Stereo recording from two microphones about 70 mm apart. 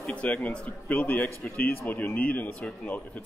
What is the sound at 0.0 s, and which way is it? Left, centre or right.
A man's voice, centre.